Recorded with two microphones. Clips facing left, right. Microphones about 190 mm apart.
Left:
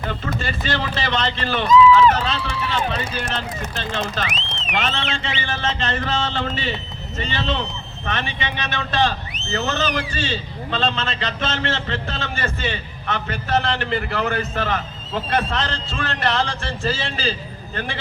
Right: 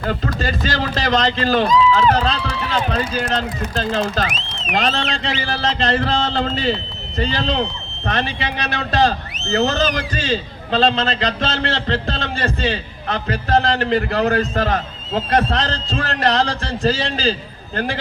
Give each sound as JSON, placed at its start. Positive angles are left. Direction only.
{"t": 0.4, "sound": "speech", "side_deg": -40}